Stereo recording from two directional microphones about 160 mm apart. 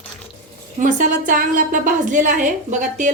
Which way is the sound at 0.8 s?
55° right (ahead or behind).